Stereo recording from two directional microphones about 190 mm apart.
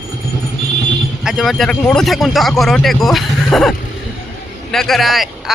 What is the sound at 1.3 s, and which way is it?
Speech, centre (ahead or behind).